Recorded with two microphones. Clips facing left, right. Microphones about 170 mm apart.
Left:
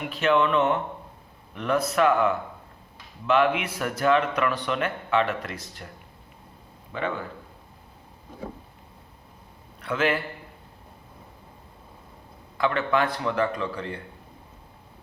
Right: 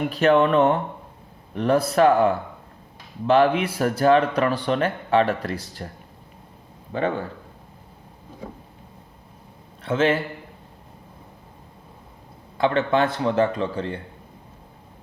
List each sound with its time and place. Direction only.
0.0 s speech: 40° right (ahead or behind)
6.9 s speech: 30° right (ahead or behind)
9.8 s speech: 25° right (ahead or behind)
12.5 s speech: 30° right (ahead or behind)